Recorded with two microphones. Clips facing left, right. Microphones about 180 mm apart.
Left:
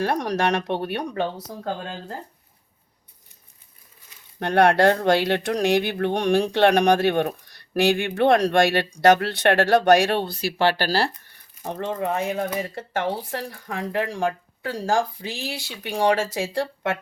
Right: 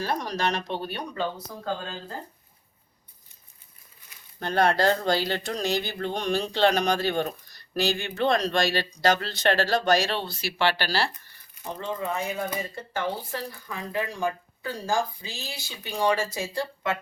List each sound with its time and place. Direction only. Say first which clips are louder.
0.0 s speech: left 5 dB; 70° left (ahead or behind)
4.4 s speech: left 5 dB; 70° left (ahead or behind); by 11.2 s 40° left (ahead or behind)
11.8 s speech: left 5 dB; 70° left (ahead or behind); by 16.6 s 85° left